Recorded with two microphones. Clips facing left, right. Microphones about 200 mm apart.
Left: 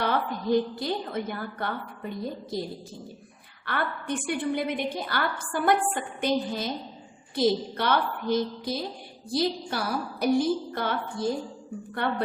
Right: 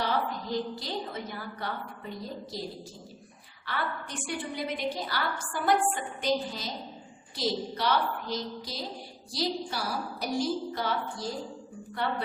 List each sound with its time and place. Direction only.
0.0 s a woman's voice: 55° left (ahead or behind)
3.7 s a woman's voice: 55° left (ahead or behind)